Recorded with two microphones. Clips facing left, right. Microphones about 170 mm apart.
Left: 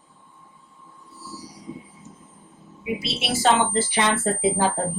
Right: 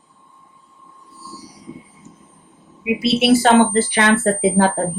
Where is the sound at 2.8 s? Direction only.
65° right (ahead or behind).